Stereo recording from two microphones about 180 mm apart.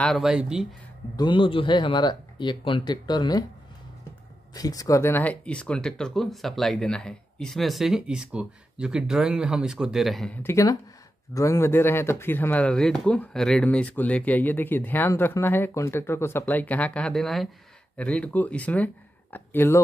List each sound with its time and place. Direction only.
0.0 s speech: centre (ahead or behind)
1.1 s speech: 25° left (ahead or behind)
4.6 s speech: 20° left (ahead or behind)